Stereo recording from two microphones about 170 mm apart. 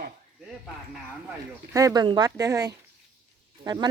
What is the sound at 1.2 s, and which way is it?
Speech, 15° right (ahead or behind).